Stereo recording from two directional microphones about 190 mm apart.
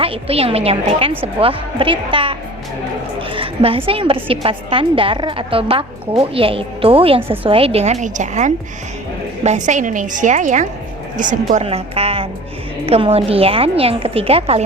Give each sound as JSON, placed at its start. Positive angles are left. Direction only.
{"t": 0.0, "sound": "a woman's voice", "side_deg": -30}